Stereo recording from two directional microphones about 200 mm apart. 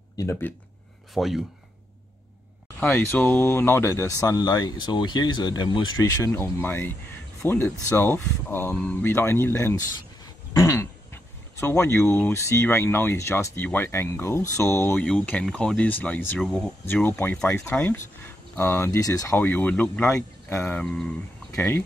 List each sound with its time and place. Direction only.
0.2 s speech: 10° left (ahead or behind)
1.1 s speech: centre (ahead or behind)
2.8 s speech: 10° left (ahead or behind)
10.5 s music: 15° left (ahead or behind)
12.1 s speech: 10° left (ahead or behind)